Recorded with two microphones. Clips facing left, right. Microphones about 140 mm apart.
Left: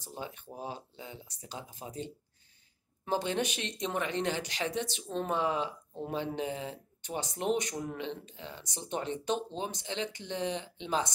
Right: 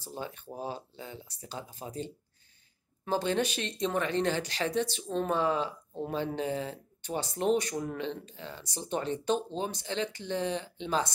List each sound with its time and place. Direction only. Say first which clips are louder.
0.0 s speech: right 2 dB; 15° left (ahead or behind)
3.1 s speech: right 2 dB; 20° left (ahead or behind)